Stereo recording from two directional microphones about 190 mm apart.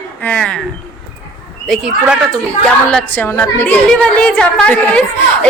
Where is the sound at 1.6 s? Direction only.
Centre (ahead or behind).